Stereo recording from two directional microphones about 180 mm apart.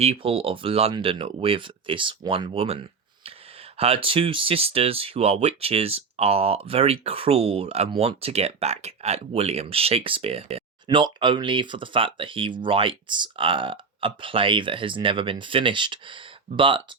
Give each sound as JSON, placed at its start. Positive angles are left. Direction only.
{"t": 0.0, "sound": "speech", "side_deg": -35}